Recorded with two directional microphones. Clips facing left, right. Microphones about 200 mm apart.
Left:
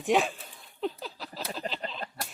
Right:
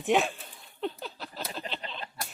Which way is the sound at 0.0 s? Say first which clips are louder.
Even; centre (ahead or behind).